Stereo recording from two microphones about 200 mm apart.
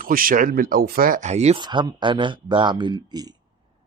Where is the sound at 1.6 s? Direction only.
20° right (ahead or behind).